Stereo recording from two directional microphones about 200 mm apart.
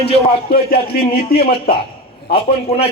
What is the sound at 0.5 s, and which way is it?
Speech, 50° left (ahead or behind).